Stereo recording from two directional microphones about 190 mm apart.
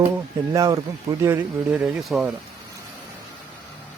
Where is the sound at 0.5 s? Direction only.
15° right (ahead or behind); by 2.3 s centre (ahead or behind).